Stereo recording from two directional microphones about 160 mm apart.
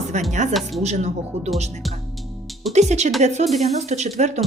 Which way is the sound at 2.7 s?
45° right (ahead or behind).